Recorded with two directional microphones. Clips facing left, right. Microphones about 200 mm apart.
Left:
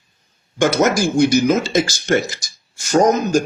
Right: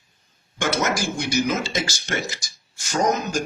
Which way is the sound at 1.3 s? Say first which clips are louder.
Left 8 dB; 45° left (ahead or behind).